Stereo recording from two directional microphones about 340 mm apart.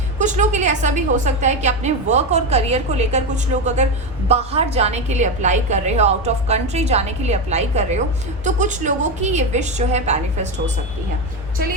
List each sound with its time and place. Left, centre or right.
0.2 s a woman's voice: right